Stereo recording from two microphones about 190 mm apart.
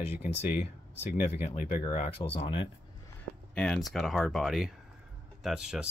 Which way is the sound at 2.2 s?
25° left (ahead or behind).